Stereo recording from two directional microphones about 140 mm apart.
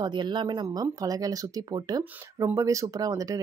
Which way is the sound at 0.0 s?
30° right (ahead or behind).